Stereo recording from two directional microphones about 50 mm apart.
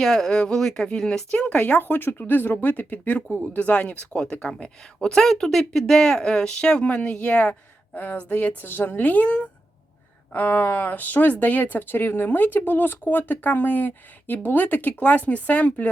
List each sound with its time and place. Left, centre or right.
0.0 s speech: centre; by 1.8 s left
1.8 s speech: left
7.9 s speech: left
9.0 s speech: left
10.3 s speech: left